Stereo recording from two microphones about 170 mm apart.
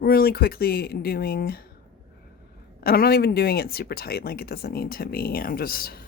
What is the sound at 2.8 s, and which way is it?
Speech, 65° left (ahead or behind).